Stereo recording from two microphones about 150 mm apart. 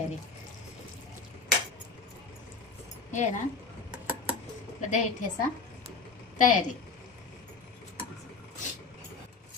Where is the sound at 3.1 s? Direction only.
50° left (ahead or behind).